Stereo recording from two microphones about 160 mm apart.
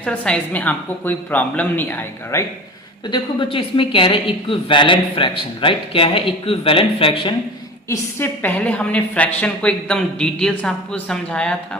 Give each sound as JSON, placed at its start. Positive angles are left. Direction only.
{"t": 0.0, "sound": "a woman's voice", "side_deg": 5}
{"t": 3.1, "sound": "a woman's voice", "side_deg": 35}
{"t": 7.9, "sound": "a woman's voice", "side_deg": 10}